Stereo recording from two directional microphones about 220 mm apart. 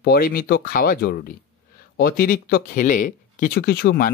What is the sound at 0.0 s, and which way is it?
Speech, 45° left (ahead or behind).